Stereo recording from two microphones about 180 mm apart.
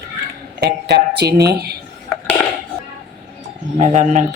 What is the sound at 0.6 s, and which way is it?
Speech, 65° right (ahead or behind).